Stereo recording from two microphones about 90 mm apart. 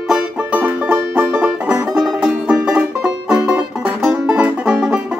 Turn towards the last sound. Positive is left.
turn(degrees=-10)  # may be behind; listen again after turning